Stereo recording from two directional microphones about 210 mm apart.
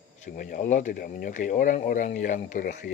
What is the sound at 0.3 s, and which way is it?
Speech, 40° left (ahead or behind).